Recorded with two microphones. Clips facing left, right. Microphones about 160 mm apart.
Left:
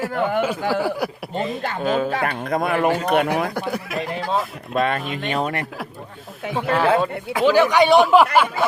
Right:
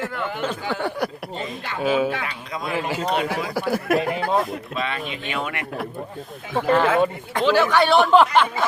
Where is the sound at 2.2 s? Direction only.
55° left (ahead or behind).